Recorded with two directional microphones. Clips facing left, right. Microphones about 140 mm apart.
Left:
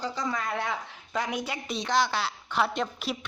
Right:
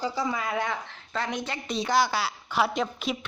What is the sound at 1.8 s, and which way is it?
Speech, 5° right (ahead or behind).